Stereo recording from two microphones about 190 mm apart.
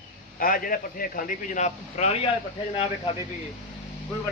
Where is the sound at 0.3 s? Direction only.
50° left (ahead or behind).